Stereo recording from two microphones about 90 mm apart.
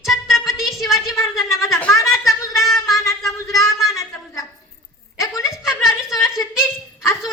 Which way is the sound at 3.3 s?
35° left (ahead or behind).